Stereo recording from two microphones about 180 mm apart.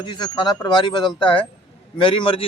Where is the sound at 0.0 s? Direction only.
25° left (ahead or behind).